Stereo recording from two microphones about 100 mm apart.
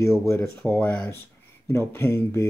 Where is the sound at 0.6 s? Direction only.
15° left (ahead or behind).